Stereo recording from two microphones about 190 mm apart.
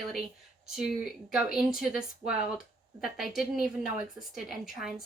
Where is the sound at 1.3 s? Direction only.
5° right (ahead or behind).